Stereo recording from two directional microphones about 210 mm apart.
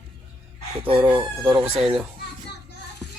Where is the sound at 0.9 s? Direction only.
5° right (ahead or behind).